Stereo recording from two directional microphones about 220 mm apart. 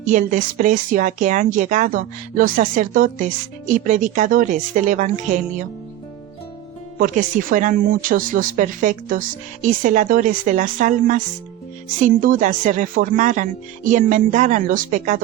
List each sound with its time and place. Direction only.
0.1 s a woman's voice: 35° right (ahead or behind)
7.0 s a woman's voice: 35° right (ahead or behind)